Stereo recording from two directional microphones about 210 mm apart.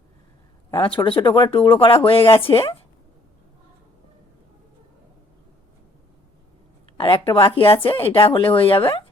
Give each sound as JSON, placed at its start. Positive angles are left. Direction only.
{"t": 0.8, "sound": "speech", "side_deg": 25}
{"t": 6.9, "sound": "speech", "side_deg": 25}